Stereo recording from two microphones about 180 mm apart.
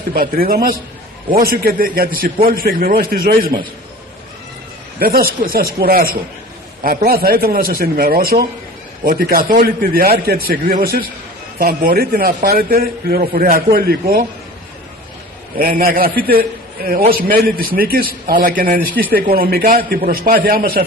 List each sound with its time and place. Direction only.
0.1 s a man's voice: 55° right (ahead or behind)
4.9 s a man's voice: 55° right (ahead or behind)
15.5 s a man's voice: 55° right (ahead or behind)